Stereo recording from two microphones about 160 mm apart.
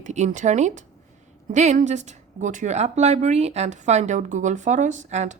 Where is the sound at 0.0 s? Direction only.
50° right (ahead or behind).